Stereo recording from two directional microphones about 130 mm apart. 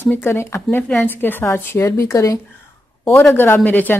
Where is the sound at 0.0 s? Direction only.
15° left (ahead or behind).